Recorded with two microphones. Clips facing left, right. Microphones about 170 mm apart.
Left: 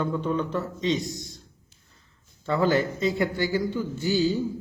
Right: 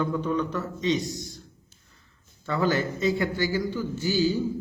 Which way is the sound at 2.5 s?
25° left (ahead or behind).